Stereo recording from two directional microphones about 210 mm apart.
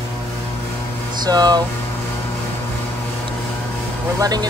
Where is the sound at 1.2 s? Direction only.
20° right (ahead or behind).